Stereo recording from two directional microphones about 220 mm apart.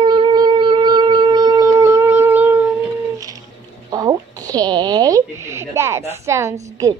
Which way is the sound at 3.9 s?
15° right (ahead or behind).